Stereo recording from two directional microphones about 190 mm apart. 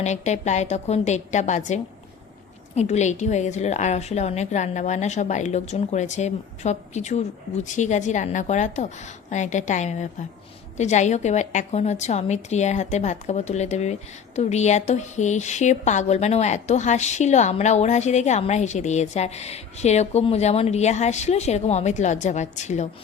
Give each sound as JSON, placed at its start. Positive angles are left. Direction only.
{"t": 0.0, "sound": "a woman's voice", "side_deg": 35}